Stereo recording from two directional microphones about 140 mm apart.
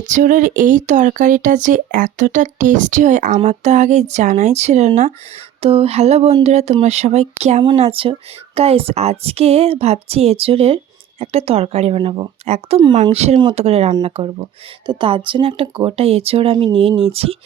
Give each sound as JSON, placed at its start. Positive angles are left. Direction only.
{"t": 0.1, "sound": "speech", "side_deg": -70}
{"t": 7.8, "sound": "speech", "side_deg": -40}
{"t": 12.5, "sound": "speech", "side_deg": -50}